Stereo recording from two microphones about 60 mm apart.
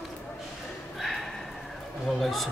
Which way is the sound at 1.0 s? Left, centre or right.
Centre.